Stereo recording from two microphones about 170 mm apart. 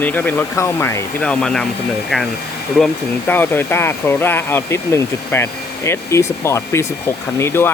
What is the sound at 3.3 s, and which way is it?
Speech, 10° left (ahead or behind).